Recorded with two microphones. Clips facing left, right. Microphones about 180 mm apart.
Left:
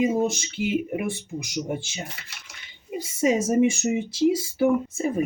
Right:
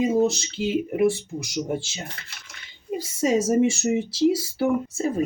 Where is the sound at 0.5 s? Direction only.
25° right (ahead or behind).